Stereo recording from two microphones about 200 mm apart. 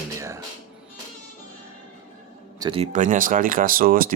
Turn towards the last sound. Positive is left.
turn(degrees=-45)  # may be behind; listen again after turning